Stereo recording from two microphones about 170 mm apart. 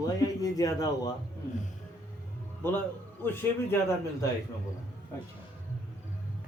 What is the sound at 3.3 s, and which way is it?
Speech, 15° left (ahead or behind).